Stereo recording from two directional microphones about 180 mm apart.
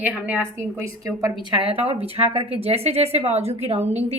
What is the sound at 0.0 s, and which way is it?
Speech, 10° right (ahead or behind).